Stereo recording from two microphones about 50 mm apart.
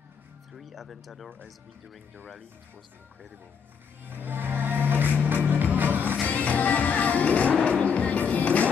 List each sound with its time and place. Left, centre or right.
0.5 s speech: centre
4.0 s music: right
6.2 s music: left